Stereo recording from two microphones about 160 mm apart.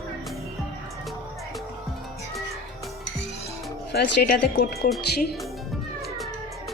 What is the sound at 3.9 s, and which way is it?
Speech, 90° left.